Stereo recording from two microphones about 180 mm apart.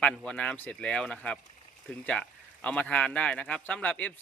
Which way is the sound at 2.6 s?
5° left (ahead or behind).